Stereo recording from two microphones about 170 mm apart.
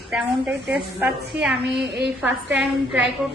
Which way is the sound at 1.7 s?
85° right.